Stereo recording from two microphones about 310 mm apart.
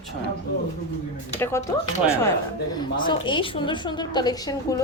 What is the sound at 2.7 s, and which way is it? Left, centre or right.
A woman's voice, centre.